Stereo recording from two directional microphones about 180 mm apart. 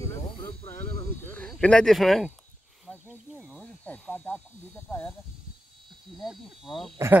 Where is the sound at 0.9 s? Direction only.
10° left (ahead or behind).